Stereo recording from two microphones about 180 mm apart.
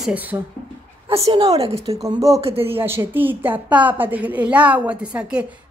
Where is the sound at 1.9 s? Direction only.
20° right (ahead or behind).